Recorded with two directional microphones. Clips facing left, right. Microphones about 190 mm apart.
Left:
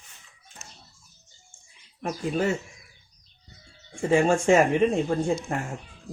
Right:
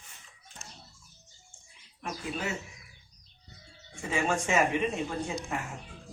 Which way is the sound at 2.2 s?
45° left (ahead or behind).